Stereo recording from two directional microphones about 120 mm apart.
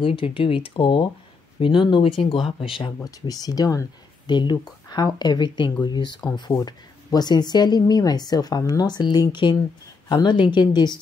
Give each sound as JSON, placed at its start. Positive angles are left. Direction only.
{"t": 0.0, "sound": "speech", "side_deg": 50}
{"t": 3.0, "sound": "speech", "side_deg": 30}